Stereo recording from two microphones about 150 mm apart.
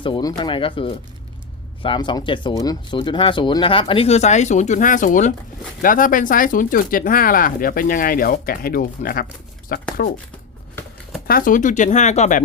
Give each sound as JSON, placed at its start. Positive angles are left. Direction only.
{"t": 0.0, "sound": "speech", "side_deg": 30}
{"t": 11.3, "sound": "speech", "side_deg": 70}